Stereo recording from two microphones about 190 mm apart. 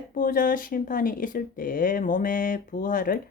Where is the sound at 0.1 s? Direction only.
45° left (ahead or behind).